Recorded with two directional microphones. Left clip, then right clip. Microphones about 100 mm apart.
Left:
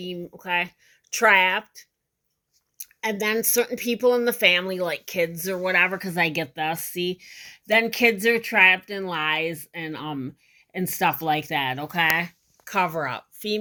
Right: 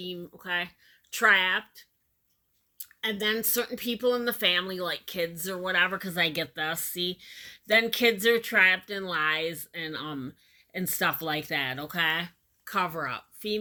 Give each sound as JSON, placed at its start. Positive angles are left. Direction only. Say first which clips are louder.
{"t": 0.2, "sound": "speech", "louder": "left 7 dB", "side_deg": 45}
{"t": 2.8, "sound": "speech", "louder": "left 3 dB", "side_deg": 50}
{"t": 12.1, "sound": "speech", "louder": "left 7 dB", "side_deg": 55}